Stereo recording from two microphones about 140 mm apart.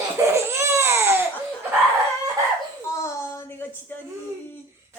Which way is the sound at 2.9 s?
20° left (ahead or behind).